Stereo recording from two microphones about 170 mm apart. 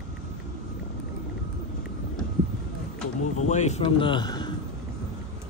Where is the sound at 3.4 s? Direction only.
45° left (ahead or behind); by 4.5 s 25° left (ahead or behind).